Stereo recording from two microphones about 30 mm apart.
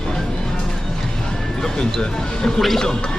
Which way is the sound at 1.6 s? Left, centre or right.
Left.